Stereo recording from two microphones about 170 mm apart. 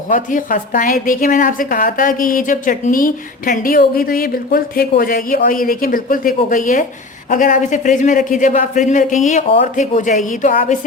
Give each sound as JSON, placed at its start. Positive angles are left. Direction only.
{"t": 0.1, "sound": "a woman's voice", "side_deg": 50}